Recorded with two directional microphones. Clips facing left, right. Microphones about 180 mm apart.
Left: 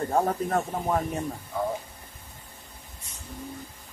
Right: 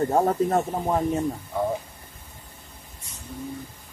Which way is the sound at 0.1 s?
20° right (ahead or behind).